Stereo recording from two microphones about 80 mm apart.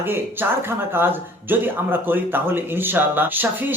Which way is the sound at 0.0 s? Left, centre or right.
Right.